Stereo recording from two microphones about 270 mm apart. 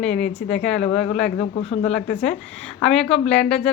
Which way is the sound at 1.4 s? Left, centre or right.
Left.